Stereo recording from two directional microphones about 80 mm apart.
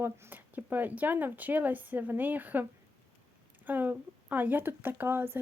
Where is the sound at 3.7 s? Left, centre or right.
Right.